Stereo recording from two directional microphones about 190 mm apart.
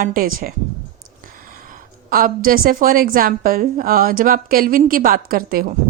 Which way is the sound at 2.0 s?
50° right (ahead or behind).